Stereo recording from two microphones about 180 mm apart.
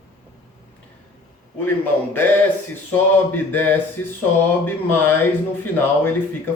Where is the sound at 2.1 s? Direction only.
10° left (ahead or behind).